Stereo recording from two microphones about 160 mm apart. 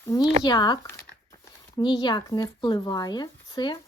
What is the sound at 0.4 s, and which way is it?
Speech, 25° left (ahead or behind).